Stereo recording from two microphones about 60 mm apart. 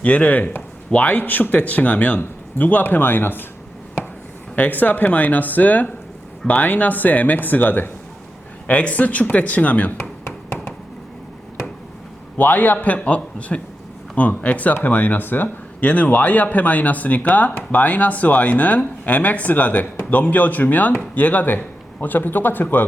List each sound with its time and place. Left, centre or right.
0.0 s speech: left
4.5 s speech: left
12.4 s speech: left